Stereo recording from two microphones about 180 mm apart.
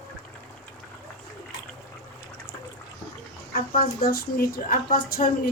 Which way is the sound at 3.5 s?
55° left (ahead or behind).